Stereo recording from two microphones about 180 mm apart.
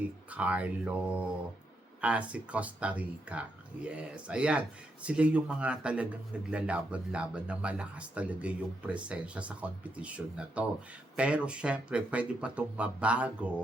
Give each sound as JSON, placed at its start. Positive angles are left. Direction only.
{"t": 0.3, "sound": "speech", "side_deg": -5}